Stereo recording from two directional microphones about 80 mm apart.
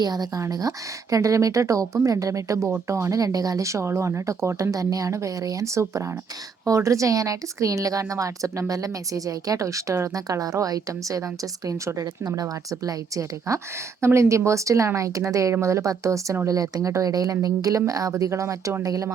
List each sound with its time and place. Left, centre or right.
0.0 s speech: right
1.1 s speech: right